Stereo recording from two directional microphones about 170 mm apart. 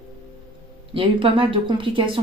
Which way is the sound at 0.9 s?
30° right (ahead or behind).